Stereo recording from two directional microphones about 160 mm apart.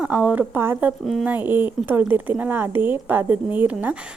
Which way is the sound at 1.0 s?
Centre (ahead or behind).